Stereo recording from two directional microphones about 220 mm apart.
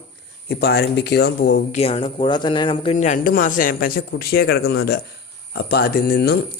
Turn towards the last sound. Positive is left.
turn(degrees=45)  # may be behind; listen again after turning